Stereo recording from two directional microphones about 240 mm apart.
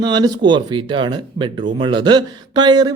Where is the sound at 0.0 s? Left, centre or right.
Centre.